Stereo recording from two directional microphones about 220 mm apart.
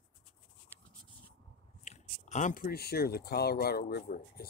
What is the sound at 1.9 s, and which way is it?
Speech, 35° left (ahead or behind).